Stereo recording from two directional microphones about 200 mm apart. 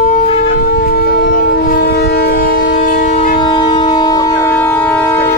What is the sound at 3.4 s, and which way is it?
Train, 25° left (ahead or behind).